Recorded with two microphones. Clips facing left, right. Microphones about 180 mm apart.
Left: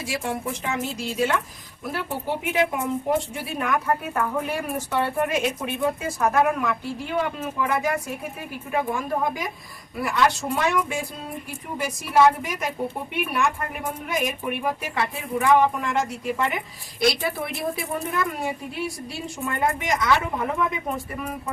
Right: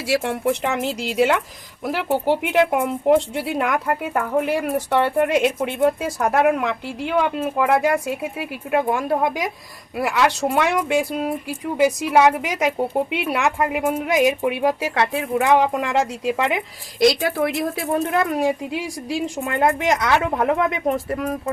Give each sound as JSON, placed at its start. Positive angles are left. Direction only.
{"t": 0.1, "sound": "a woman's voice", "side_deg": -70}